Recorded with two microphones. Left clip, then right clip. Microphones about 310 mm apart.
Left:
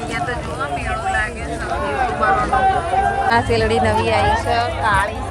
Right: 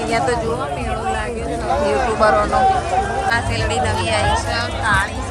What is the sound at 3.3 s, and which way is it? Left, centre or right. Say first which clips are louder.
Speech: left 3 dB; centre.